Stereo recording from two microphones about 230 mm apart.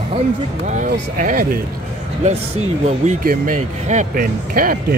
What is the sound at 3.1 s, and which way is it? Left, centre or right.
Speech, right.